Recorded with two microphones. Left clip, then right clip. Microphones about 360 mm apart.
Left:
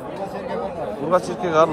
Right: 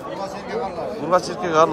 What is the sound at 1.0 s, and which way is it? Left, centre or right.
Speech, centre.